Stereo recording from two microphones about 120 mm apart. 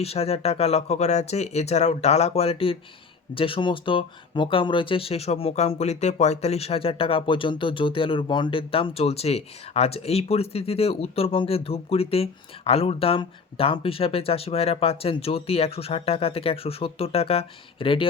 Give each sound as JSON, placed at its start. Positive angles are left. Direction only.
{"t": 0.0, "sound": "speech", "side_deg": 55}